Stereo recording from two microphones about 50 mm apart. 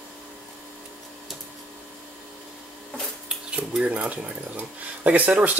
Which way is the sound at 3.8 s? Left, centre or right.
Right.